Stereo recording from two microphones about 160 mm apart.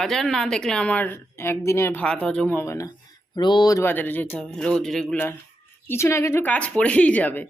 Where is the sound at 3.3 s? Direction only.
25° left (ahead or behind).